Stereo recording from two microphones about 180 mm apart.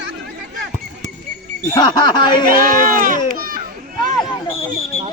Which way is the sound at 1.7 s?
25° left (ahead or behind).